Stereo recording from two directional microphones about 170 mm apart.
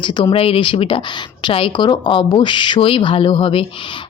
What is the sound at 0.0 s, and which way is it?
A woman's voice, 25° left (ahead or behind).